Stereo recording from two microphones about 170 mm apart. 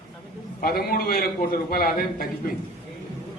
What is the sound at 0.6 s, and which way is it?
A man's voice, 65° left (ahead or behind).